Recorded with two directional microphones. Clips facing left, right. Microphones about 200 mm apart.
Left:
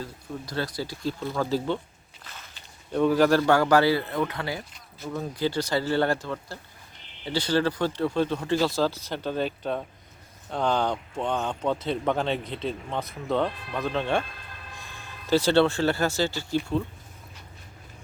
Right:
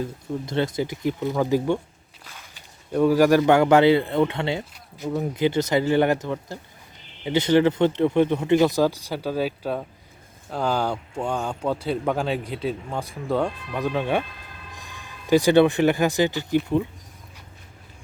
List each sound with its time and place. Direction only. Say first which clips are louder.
0.0 s speech: right 7 dB; 20° right (ahead or behind)
2.2 s walk: even; 10° right (ahead or behind)
2.9 s speech: right 3 dB; 10° right (ahead or behind)